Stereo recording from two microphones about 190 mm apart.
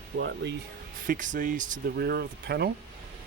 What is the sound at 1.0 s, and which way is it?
Speech, 45° right (ahead or behind).